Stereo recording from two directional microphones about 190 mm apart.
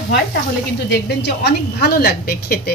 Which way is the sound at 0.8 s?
65° left (ahead or behind).